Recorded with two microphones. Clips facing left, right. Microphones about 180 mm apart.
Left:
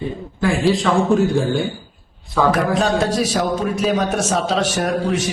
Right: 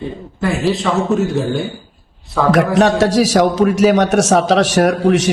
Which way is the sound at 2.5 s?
85° right.